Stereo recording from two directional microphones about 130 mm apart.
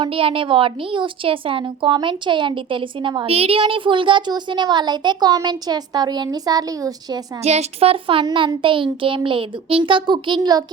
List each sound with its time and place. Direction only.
0.0 s a woman's voice: 45° right (ahead or behind)
3.2 s a woman's voice: 50° right (ahead or behind); by 7.2 s 30° right (ahead or behind)
7.4 s a woman's voice: 55° right (ahead or behind); by 10.6 s 35° right (ahead or behind)